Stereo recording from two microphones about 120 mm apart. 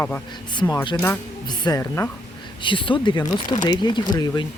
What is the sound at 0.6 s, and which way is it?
Speech, 15° left (ahead or behind).